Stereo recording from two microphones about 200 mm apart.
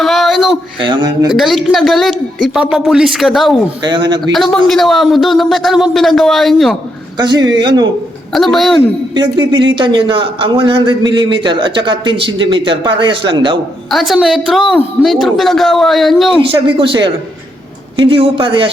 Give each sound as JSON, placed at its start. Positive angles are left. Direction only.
{"t": 0.0, "sound": "a sound", "side_deg": 0}
{"t": 0.8, "sound": "a man's voice", "side_deg": -20}
{"t": 1.3, "sound": "a woman's voice", "side_deg": 0}
{"t": 3.8, "sound": "a man's voice", "side_deg": -20}
{"t": 4.3, "sound": "a woman's voice", "side_deg": 0}
{"t": 7.2, "sound": "a man's voice", "side_deg": -20}
{"t": 8.3, "sound": "a woman's voice", "side_deg": 0}
{"t": 9.1, "sound": "a man's voice", "side_deg": -25}
{"t": 13.9, "sound": "a woman's voice", "side_deg": 0}
{"t": 16.5, "sound": "a man's voice", "side_deg": -25}